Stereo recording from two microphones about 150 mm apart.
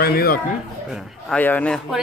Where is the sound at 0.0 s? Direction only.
85° left.